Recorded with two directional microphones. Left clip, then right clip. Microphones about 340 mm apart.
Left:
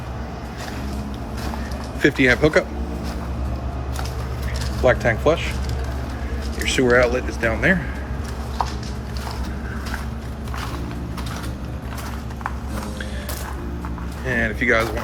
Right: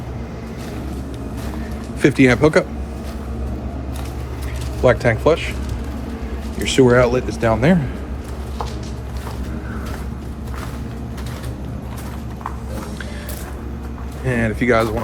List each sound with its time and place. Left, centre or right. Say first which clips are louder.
2.0 s speech: right 2 dB; centre
4.9 s speech: right 2 dB; centre
6.6 s speech: right 3 dB; centre
14.3 s speech: right 1 dB; centre